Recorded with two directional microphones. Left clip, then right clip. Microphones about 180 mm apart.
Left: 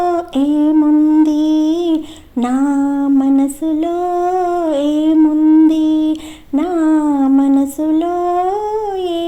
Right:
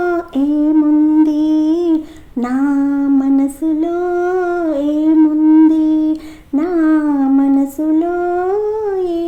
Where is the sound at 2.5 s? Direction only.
30° left (ahead or behind).